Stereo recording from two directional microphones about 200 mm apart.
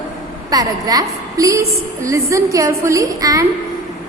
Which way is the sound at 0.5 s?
20° right (ahead or behind).